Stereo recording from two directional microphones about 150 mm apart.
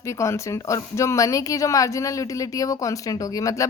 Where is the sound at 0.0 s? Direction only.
20° left (ahead or behind).